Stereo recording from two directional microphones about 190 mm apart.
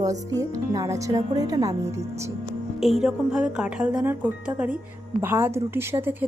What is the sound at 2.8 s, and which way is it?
A woman's voice, centre (ahead or behind).